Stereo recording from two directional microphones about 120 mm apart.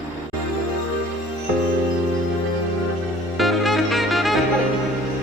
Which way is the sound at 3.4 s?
Centre (ahead or behind).